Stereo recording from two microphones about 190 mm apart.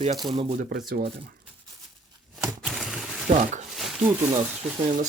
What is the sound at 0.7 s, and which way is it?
Speech, 60° right (ahead or behind).